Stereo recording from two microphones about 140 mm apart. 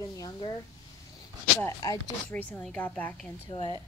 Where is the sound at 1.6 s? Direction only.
25° left (ahead or behind).